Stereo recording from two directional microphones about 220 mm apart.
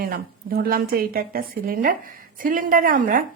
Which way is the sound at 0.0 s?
45° right (ahead or behind).